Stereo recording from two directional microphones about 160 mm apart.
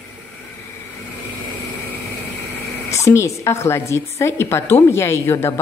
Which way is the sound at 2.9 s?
20° left (ahead or behind).